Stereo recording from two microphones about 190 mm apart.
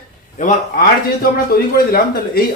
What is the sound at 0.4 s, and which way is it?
Speech, 45° left (ahead or behind).